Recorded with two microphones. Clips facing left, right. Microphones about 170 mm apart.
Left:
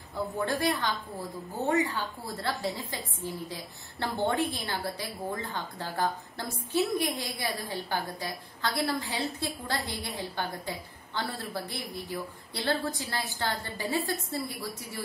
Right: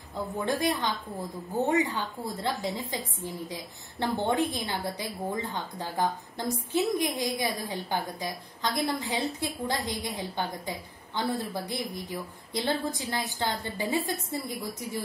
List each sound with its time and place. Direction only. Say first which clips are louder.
0.4 s a woman's voice: right 1 dB; 20° right (ahead or behind)